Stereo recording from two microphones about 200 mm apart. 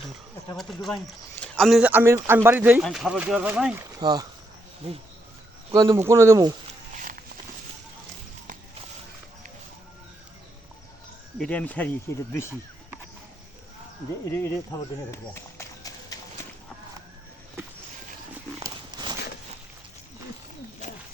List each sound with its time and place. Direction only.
0.5 s a man's voice: centre (ahead or behind)
4.0 s speech: 20° right (ahead or behind)
5.7 s speech: 25° right (ahead or behind)
6.0 s a man's voice: 15° right (ahead or behind)
6.9 s walk: 40° right (ahead or behind)
11.3 s speech: 5° left (ahead or behind)
14.3 s run: 15° left (ahead or behind)
18.6 s walk: 20° right (ahead or behind)